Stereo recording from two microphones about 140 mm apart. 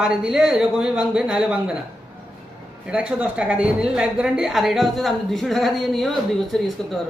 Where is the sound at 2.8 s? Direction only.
10° right (ahead or behind).